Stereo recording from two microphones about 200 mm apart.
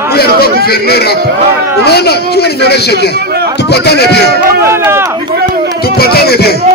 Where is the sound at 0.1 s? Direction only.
50° left (ahead or behind).